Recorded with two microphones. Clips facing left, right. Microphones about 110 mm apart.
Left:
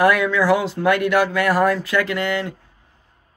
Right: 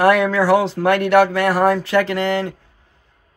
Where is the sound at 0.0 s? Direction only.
35° right (ahead or behind).